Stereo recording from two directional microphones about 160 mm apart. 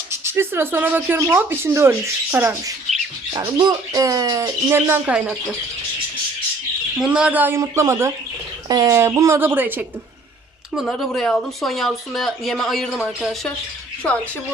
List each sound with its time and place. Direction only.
0.1 s speech: 15° right (ahead or behind)
3.3 s speech: 25° right (ahead or behind); by 5.4 s 5° right (ahead or behind)
7.0 s speech: 5° right (ahead or behind)
10.8 s speech: centre (ahead or behind)